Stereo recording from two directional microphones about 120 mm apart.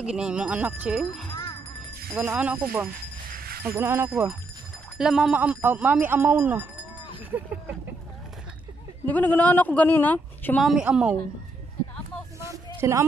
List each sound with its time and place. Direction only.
0.0 s speech: 5° right (ahead or behind)
1.3 s music: 30° left (ahead or behind)
2.1 s speech: 10° right (ahead or behind)
3.7 s speech: 20° right (ahead or behind)
4.1 s speech: 10° right (ahead or behind)
9.0 s speech: 15° left (ahead or behind)
10.6 s speech: 5° right (ahead or behind)
12.4 s a sound: 25° right (ahead or behind)